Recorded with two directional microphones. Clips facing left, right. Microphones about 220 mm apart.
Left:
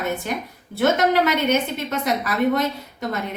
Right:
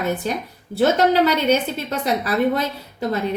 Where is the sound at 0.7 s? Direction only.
30° right (ahead or behind).